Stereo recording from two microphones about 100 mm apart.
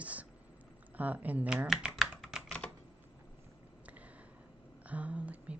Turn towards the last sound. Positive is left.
turn(degrees=-15)  # may be behind; listen again after turning